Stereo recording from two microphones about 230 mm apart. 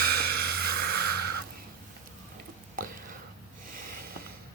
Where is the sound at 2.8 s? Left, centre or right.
Right.